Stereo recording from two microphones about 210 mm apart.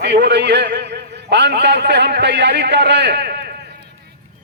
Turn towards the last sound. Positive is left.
turn(degrees=-50)  # may be behind; listen again after turning